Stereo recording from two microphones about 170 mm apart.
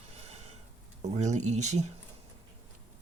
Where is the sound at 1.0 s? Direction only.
40° right (ahead or behind).